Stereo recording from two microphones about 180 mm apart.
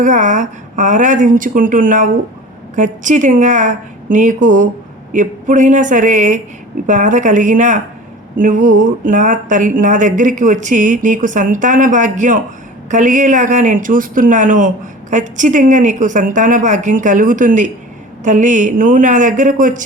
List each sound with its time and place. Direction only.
0.0 s speech: 45° right (ahead or behind)